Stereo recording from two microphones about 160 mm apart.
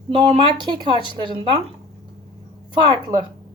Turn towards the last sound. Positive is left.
turn(degrees=-20)  # may be behind; listen again after turning